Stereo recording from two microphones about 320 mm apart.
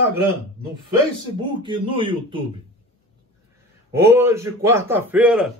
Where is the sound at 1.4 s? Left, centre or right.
Centre.